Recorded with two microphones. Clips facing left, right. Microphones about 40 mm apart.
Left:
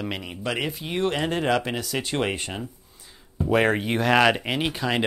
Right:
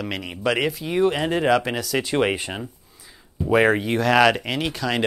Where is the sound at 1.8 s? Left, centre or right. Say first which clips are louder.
Right 4 dB; centre.